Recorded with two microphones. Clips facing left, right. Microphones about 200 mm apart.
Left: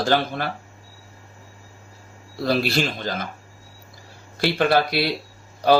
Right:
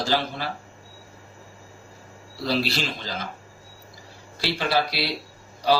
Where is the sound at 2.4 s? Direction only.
55° left (ahead or behind).